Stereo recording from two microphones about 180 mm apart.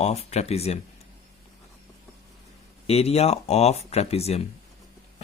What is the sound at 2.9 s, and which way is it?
Speech, 35° left (ahead or behind).